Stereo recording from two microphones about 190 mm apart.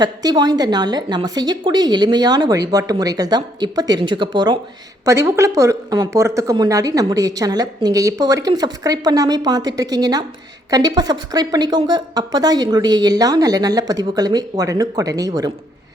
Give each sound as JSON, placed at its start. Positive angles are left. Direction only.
{"t": 0.0, "sound": "a woman's voice", "side_deg": -20}